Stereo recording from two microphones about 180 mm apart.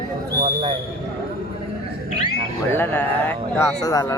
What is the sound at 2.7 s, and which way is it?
Speech, 10° left (ahead or behind).